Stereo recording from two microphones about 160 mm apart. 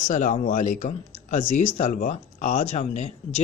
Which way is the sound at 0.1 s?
50° left (ahead or behind).